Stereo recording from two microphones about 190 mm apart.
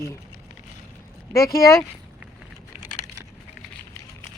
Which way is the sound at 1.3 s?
15° left (ahead or behind).